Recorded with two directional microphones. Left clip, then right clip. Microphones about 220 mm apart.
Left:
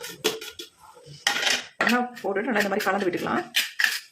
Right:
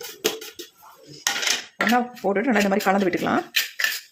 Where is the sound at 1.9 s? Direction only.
30° right (ahead or behind).